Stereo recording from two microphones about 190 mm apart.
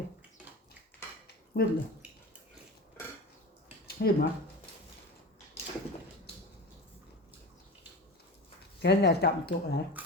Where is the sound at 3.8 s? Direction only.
55° left (ahead or behind).